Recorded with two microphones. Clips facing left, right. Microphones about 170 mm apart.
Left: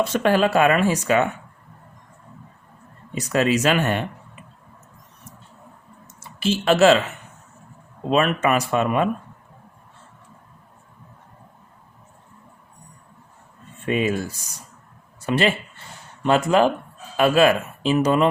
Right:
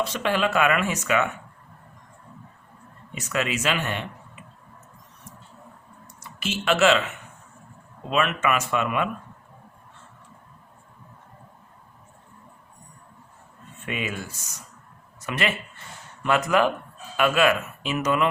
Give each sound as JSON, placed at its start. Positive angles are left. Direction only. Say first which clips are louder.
{"t": 0.0, "sound": "speech", "louder": "left 6 dB", "side_deg": 45}
{"t": 3.2, "sound": "speech", "louder": "left 7 dB", "side_deg": 35}
{"t": 6.1, "sound": "a sound", "louder": "left 9 dB", "side_deg": 30}
{"t": 8.1, "sound": "speech", "louder": "left 4 dB", "side_deg": 35}
{"t": 13.8, "sound": "speech", "louder": "left 9 dB", "side_deg": 35}